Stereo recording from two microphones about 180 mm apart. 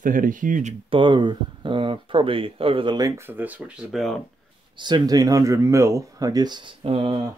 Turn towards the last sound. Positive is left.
turn(degrees=-30)  # may be behind; listen again after turning